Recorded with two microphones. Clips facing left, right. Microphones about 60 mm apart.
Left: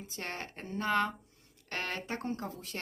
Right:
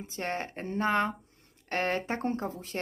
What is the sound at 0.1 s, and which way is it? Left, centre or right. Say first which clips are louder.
A woman's voice: right 7 dB; right.